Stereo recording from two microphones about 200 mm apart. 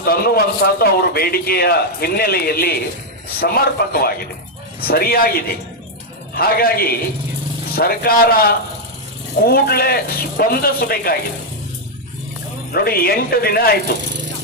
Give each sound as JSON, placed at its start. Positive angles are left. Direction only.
{"t": 0.0, "sound": "a man's voice", "side_deg": 50}
{"t": 12.7, "sound": "a man's voice", "side_deg": 50}